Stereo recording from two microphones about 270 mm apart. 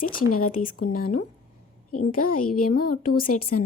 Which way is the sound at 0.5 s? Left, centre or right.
Left.